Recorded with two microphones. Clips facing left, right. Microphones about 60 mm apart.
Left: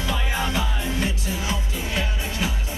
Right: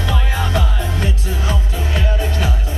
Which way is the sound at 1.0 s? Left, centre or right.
Right.